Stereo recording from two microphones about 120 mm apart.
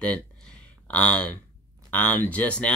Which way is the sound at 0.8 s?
10° left (ahead or behind).